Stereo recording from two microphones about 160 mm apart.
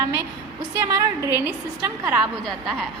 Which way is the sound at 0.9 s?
20° right (ahead or behind).